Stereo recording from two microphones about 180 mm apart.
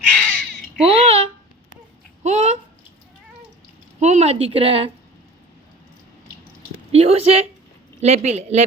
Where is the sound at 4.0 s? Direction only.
40° right (ahead or behind).